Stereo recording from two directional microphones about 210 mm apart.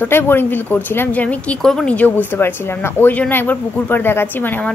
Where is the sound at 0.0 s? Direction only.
10° left (ahead or behind).